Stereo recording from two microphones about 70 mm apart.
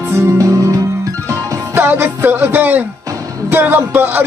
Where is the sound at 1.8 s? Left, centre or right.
Right.